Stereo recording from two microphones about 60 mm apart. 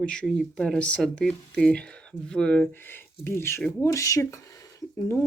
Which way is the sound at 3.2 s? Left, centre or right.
Left.